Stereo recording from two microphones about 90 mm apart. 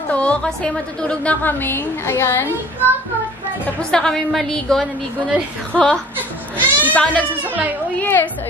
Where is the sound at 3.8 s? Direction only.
5° left (ahead or behind).